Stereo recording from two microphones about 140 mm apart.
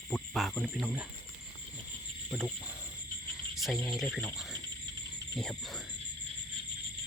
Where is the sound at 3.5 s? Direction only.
Centre (ahead or behind).